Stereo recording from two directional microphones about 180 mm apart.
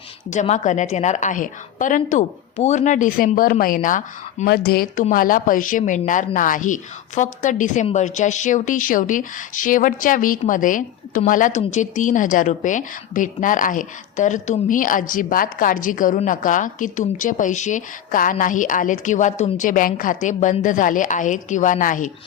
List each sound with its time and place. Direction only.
0.3 s speech: 40° left (ahead or behind)